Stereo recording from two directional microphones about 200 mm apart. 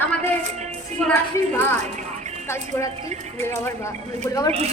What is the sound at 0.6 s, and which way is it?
Speech, 35° right (ahead or behind).